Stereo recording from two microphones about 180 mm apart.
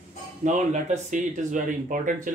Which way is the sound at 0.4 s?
40° right (ahead or behind).